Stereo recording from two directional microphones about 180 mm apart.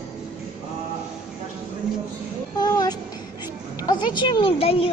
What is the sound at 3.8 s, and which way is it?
A woman's voice, 25° left (ahead or behind).